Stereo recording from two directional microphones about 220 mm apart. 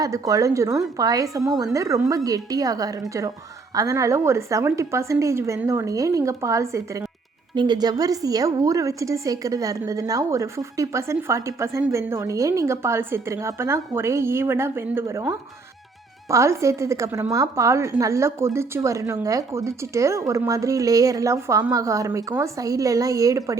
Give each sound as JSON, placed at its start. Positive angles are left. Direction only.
{"t": 0.0, "sound": "a woman's voice", "side_deg": -15}